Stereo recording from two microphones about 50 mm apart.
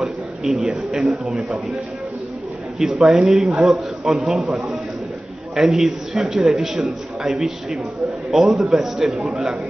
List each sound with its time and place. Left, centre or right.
0.0 s a man's voice: centre
2.8 s a man's voice: centre
5.6 s a man's voice: centre